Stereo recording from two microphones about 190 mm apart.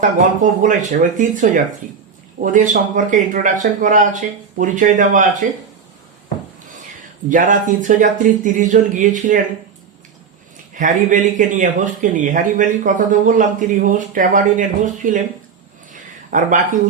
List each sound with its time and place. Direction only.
0.6 s speech: 40° right (ahead or behind)
7.3 s speech: 40° right (ahead or behind)
10.8 s speech: 40° right (ahead or behind)
15.9 s a sound: 45° right (ahead or behind)